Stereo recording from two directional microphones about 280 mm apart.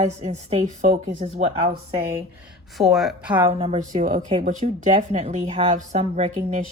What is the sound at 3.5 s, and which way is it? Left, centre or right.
Speech, right.